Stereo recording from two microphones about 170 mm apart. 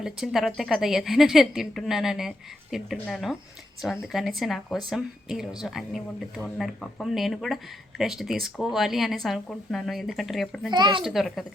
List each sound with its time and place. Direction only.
0.0 s speech: centre (ahead or behind)
10.7 s speech: 25° right (ahead or behind)
11.0 s speech: centre (ahead or behind)